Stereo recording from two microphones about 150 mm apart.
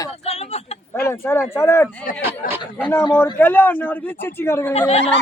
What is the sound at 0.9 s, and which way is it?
Speech, 15° left (ahead or behind).